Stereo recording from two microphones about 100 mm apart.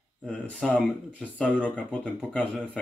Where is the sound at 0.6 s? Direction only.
5° left (ahead or behind).